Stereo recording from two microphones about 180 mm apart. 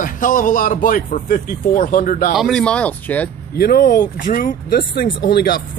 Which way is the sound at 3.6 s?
55° left (ahead or behind).